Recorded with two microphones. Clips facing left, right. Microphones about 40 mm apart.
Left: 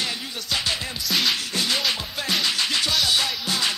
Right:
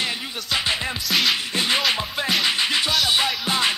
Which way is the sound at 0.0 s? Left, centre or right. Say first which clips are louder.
Right 2 dB; right.